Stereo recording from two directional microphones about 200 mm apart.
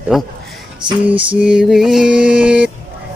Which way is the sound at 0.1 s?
5° right (ahead or behind).